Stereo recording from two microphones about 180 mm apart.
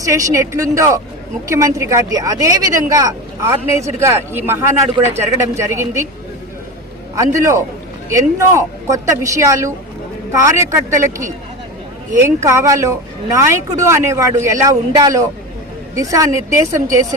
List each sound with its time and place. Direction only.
0.0 s speech: 15° right (ahead or behind)
7.2 s speech: 15° right (ahead or behind)